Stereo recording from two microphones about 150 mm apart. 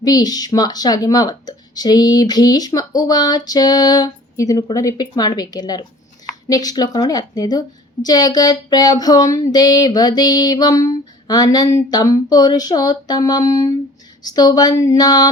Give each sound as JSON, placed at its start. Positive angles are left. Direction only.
{"t": 0.0, "sound": "a woman's voice", "side_deg": 25}